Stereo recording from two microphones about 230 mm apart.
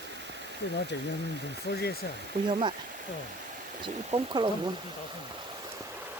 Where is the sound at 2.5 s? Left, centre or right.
Right.